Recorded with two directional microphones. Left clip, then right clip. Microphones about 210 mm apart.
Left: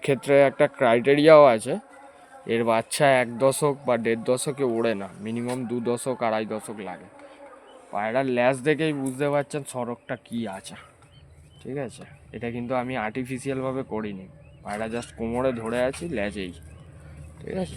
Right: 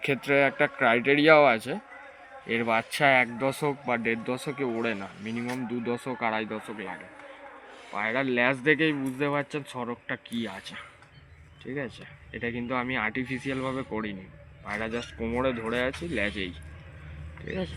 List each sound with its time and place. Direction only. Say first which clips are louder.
0.0 s speech: left 5 dB; 60° left (ahead or behind)
7.9 s speech: left 3 dB; 60° left (ahead or behind)
11.6 s speech: left 2 dB; 65° left (ahead or behind)